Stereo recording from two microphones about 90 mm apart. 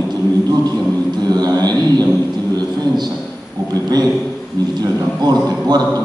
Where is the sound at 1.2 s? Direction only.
45° right (ahead or behind).